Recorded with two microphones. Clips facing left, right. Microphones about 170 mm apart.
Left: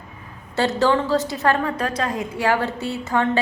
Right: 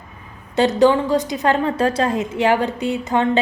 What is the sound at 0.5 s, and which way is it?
A woman's voice, 20° right (ahead or behind).